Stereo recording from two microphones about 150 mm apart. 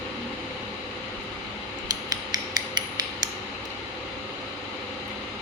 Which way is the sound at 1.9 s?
25° right (ahead or behind).